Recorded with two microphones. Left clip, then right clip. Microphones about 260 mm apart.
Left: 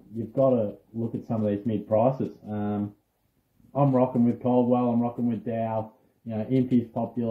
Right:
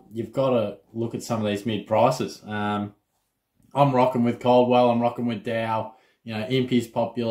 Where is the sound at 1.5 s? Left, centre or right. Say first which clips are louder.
Even; centre.